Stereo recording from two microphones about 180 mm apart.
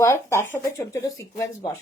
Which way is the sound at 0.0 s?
15° left (ahead or behind).